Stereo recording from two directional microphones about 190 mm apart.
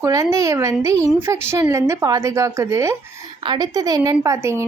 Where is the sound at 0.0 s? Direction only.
15° right (ahead or behind).